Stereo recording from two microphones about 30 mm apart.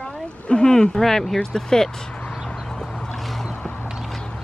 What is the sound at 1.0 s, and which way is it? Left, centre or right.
Speech, centre.